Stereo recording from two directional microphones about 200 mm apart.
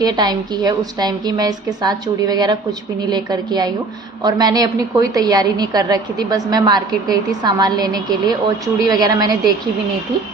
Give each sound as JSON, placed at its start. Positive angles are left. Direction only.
{"t": 0.0, "sound": "a woman's voice", "side_deg": -20}